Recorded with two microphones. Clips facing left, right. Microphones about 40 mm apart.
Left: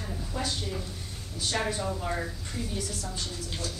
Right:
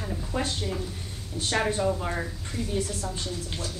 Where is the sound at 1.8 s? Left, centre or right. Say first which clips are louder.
Right 4 dB; centre.